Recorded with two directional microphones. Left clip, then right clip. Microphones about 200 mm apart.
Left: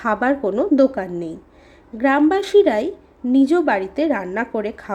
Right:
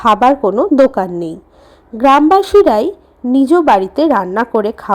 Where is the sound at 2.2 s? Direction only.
15° right (ahead or behind).